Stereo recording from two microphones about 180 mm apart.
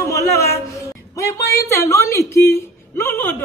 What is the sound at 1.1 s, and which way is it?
A man's voice, 15° left (ahead or behind).